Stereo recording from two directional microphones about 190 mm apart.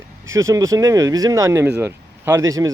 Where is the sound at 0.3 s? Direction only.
15° right (ahead or behind).